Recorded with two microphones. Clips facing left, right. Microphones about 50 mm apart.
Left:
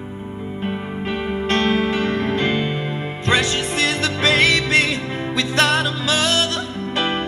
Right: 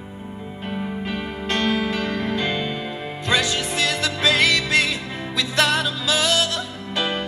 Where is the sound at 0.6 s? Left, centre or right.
Centre.